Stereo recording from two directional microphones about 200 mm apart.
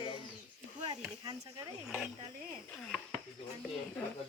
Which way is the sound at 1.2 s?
20° right (ahead or behind).